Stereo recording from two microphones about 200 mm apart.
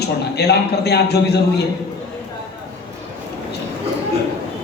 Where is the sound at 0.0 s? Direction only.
55° left (ahead or behind).